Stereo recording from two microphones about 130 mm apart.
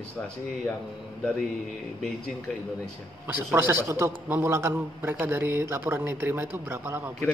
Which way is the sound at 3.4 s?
15° right (ahead or behind).